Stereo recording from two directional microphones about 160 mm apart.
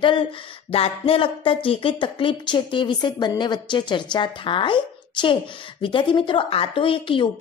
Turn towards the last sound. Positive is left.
turn(degrees=30)  # may be behind; listen again after turning